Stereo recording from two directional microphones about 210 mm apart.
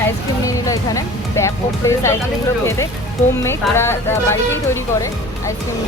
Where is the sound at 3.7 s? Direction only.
10° left (ahead or behind).